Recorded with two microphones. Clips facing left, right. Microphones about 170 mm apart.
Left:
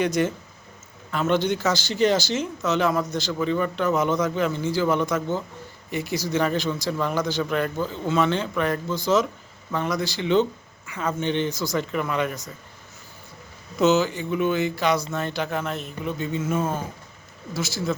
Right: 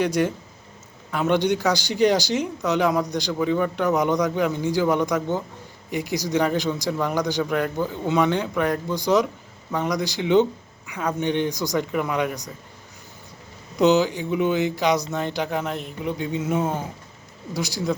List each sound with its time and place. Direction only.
0.0 s speech: 10° right (ahead or behind)
13.7 s speech: 15° right (ahead or behind)